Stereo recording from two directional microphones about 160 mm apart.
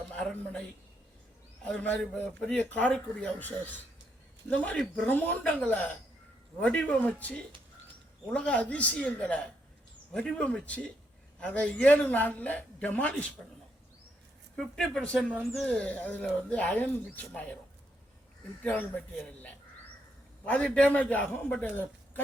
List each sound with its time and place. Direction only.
0.1 s speech: 5° left (ahead or behind)
14.5 s speech: 5° left (ahead or behind)
18.6 s speech: 10° left (ahead or behind)